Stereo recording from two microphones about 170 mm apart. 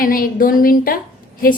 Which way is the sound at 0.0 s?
55° left (ahead or behind).